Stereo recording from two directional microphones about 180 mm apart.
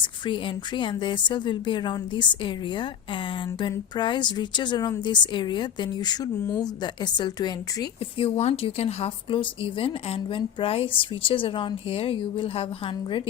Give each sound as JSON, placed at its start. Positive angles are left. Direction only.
{"t": 0.0, "sound": "speech", "side_deg": 25}
{"t": 8.4, "sound": "speech", "side_deg": 35}